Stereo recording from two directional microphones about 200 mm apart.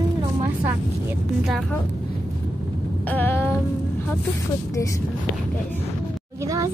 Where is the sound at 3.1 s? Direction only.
10° left (ahead or behind).